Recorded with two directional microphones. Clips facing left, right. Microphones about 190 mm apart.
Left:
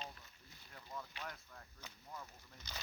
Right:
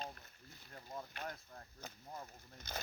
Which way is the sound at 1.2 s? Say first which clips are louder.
Right 3 dB; 40° right (ahead or behind).